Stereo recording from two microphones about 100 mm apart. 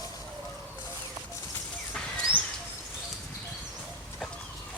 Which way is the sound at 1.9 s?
10° left (ahead or behind).